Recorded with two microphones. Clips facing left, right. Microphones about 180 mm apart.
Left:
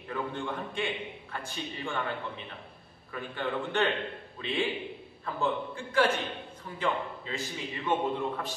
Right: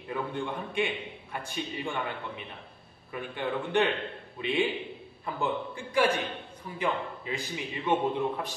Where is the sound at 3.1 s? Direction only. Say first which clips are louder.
Right 1 dB; 15° right (ahead or behind).